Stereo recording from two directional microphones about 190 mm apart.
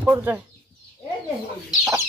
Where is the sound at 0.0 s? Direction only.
10° right (ahead or behind).